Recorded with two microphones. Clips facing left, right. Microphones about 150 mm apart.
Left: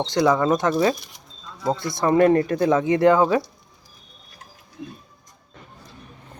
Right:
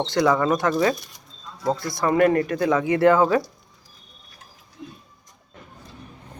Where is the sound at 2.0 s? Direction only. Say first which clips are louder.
Left 2 dB; 25° left (ahead or behind).